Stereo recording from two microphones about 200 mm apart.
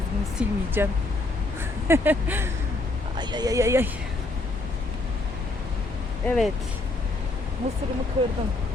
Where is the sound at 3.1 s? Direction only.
20° right (ahead or behind).